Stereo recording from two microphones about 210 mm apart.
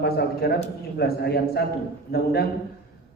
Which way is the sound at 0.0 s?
50° left (ahead or behind).